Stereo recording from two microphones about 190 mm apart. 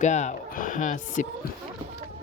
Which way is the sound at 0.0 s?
40° left (ahead or behind).